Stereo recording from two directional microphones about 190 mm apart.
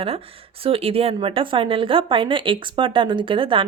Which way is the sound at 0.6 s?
30° right (ahead or behind).